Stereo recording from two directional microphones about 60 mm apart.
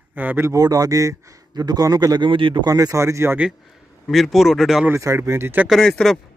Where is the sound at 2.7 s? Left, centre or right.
Right.